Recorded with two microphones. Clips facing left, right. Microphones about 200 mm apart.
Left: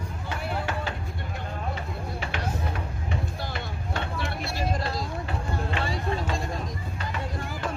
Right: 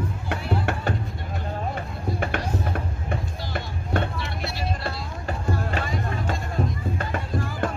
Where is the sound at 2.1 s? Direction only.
50° right (ahead or behind).